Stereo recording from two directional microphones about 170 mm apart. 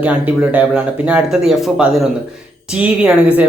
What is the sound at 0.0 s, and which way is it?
Speech, 10° right (ahead or behind).